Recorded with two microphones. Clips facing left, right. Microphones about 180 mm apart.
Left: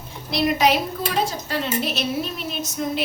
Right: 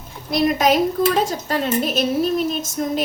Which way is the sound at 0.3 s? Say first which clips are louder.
Right 2 dB; 45° right (ahead or behind).